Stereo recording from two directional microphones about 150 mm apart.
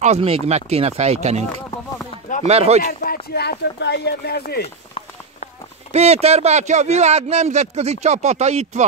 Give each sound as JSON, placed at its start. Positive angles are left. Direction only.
{"t": 0.0, "sound": "speech", "side_deg": -45}
{"t": 2.4, "sound": "speech", "side_deg": -45}
{"t": 2.8, "sound": "speech", "side_deg": 75}
{"t": 5.9, "sound": "speech", "side_deg": -45}